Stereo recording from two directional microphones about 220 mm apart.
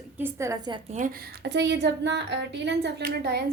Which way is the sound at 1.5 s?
50° right (ahead or behind).